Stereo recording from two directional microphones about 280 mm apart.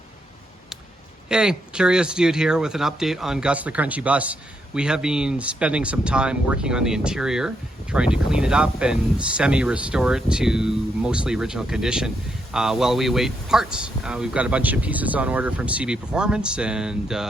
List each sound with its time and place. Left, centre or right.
1.3 s speech: centre